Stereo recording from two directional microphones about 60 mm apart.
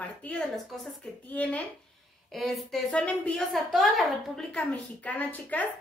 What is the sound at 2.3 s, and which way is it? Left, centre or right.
Speech, centre.